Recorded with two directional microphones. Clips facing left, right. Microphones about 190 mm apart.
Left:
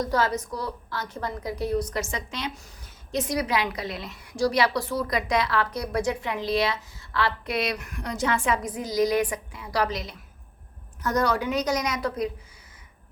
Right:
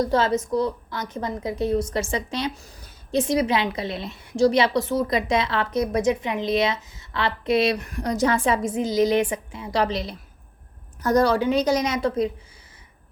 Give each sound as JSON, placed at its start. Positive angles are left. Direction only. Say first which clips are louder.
{"t": 0.0, "sound": "a woman's voice", "louder": "right 4 dB", "side_deg": -25}